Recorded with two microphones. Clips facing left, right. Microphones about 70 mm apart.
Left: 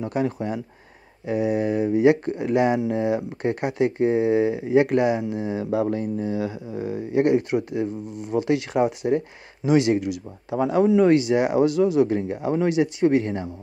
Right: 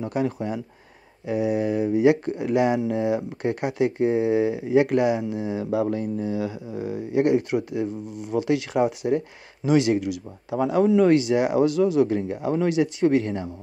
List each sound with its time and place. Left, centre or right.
0.1 s speech: left